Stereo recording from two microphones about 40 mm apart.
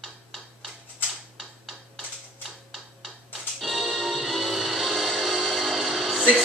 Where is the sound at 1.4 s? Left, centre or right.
Centre.